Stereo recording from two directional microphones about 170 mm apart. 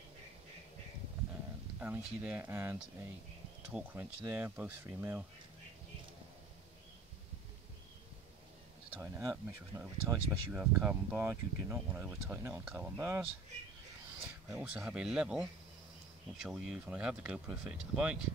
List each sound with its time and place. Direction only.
1.8 s speech: 10° right (ahead or behind)
8.9 s speech: 15° right (ahead or behind)
10.6 s speech: 5° right (ahead or behind)
14.5 s speech: 5° right (ahead or behind)